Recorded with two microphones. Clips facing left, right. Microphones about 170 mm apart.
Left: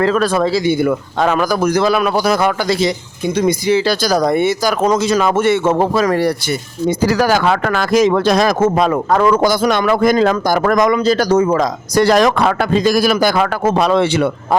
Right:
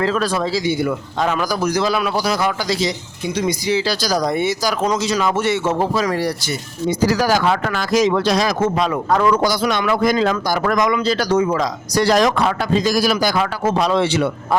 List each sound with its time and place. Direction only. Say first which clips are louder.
0.0 s speech: left 5 dB; 55° left (ahead or behind)